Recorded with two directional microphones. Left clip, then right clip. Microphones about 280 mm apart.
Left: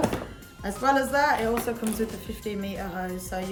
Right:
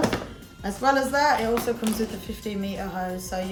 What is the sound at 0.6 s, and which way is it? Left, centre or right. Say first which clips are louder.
Speech: right 1 dB; centre.